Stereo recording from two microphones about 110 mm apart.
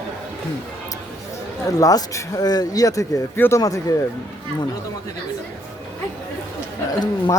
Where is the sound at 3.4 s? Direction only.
20° left (ahead or behind).